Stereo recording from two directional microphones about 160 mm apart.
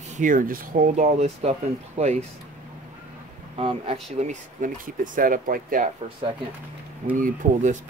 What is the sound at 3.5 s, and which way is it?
Speech, 35° right (ahead or behind).